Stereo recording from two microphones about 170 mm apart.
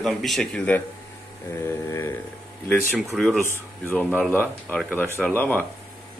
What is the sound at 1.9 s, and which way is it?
Speech, 15° left (ahead or behind).